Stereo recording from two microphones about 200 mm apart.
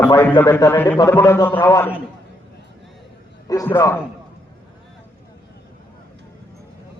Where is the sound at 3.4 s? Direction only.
15° left (ahead or behind).